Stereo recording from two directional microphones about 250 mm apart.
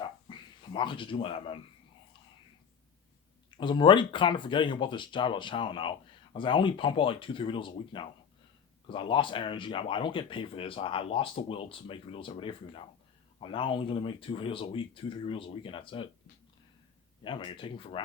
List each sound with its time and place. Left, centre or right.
0.0 s a sound: centre
3.5 s speech: centre
17.2 s speech: centre